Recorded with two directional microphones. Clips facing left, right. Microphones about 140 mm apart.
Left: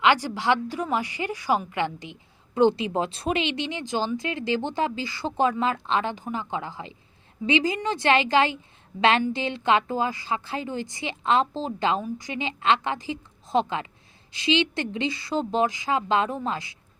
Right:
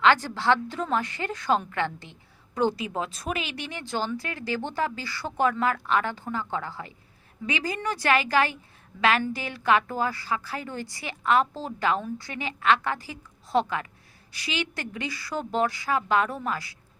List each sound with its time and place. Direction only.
0.0 s a woman's voice: 15° left (ahead or behind)